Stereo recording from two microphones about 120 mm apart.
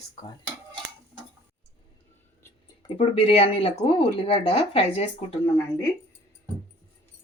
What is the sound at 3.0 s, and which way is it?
Speech, 50° left (ahead or behind).